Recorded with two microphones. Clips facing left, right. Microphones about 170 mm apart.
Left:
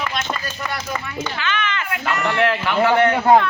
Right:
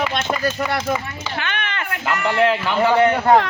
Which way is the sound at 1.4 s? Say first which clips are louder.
Left 2 dB; 55° right (ahead or behind).